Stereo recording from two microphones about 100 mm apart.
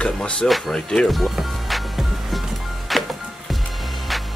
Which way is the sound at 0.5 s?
Centre (ahead or behind).